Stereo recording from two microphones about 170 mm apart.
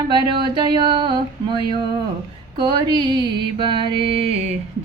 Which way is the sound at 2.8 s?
25° right (ahead or behind).